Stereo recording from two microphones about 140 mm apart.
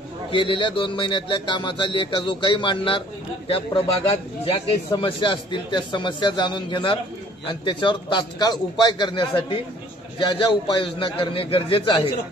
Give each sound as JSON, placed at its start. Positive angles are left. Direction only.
{"t": 0.3, "sound": "speech", "side_deg": 35}